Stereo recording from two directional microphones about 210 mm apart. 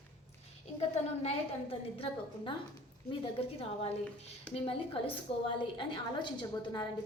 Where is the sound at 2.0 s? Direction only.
25° left (ahead or behind).